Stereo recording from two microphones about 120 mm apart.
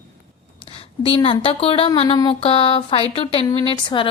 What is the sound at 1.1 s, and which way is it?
Speech, 45° left (ahead or behind).